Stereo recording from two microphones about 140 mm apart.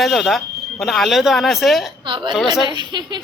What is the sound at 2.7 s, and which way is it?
Speech, 30° right (ahead or behind).